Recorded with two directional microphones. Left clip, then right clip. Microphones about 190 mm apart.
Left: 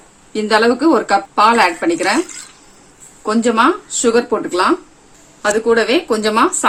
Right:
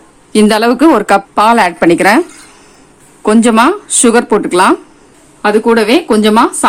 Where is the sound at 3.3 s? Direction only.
60° right (ahead or behind).